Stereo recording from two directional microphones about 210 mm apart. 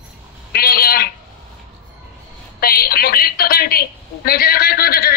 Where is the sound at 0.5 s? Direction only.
45° left (ahead or behind).